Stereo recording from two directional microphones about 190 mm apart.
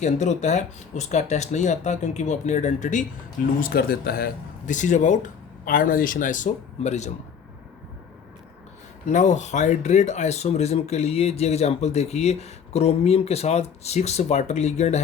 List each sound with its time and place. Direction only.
0.0 s speech: 40° left (ahead or behind)
3.6 s speech: 55° left (ahead or behind); by 7.1 s 35° left (ahead or behind)
9.0 s speech: 40° left (ahead or behind)